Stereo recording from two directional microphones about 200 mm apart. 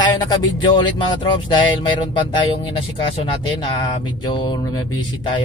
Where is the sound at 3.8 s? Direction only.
20° left (ahead or behind).